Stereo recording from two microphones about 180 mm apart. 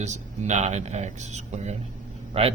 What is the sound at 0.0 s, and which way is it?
Speech, 40° right (ahead or behind).